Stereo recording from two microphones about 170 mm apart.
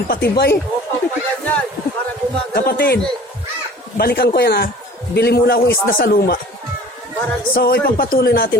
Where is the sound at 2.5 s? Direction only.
60° left (ahead or behind).